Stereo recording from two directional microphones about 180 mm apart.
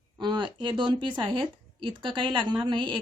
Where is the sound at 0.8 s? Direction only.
25° right (ahead or behind).